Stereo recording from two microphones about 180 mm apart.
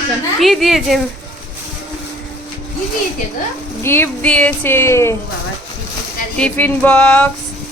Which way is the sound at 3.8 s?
10° left (ahead or behind).